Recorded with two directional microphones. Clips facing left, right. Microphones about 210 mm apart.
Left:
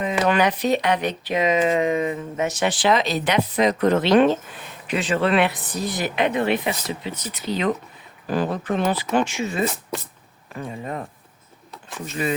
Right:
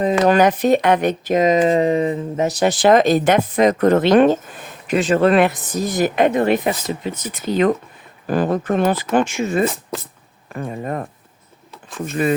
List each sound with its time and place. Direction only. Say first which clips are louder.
0.0 s speech: right 6 dB; 40° right (ahead or behind)